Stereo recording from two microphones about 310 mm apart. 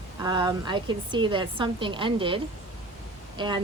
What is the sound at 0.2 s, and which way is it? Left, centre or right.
A woman's voice, centre.